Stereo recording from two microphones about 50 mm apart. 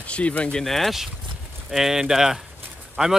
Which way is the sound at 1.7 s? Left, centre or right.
Centre.